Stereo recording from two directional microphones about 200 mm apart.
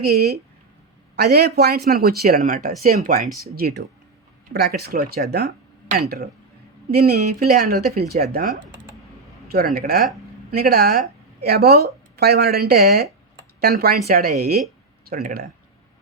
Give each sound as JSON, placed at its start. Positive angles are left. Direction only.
{"t": 0.0, "sound": "a man's voice", "side_deg": -50}